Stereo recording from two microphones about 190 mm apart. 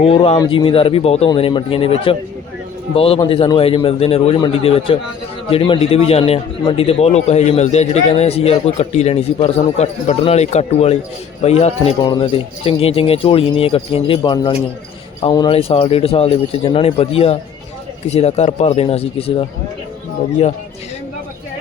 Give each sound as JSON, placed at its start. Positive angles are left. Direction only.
{"t": 0.0, "sound": "a man's voice", "side_deg": 30}